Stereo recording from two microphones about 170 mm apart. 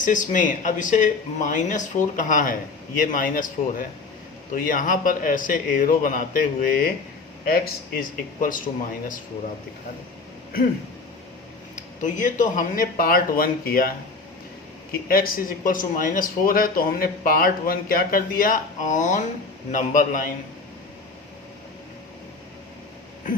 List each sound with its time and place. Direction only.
0.0 s a man's voice: 50° left (ahead or behind)
12.0 s speech: 50° left (ahead or behind)
15.0 s a man's voice: 60° left (ahead or behind)